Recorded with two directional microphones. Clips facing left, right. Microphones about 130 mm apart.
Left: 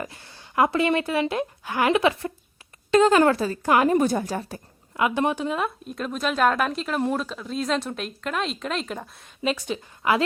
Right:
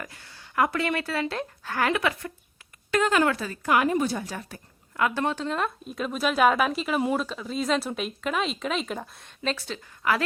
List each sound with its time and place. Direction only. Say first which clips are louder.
0.0 s speech: left 5 dB; 25° left (ahead or behind); by 4.4 s 50° left (ahead or behind)
4.4 s speech: left 7 dB; 30° left (ahead or behind)
4.9 s a woman's voice: left 3 dB; 20° left (ahead or behind)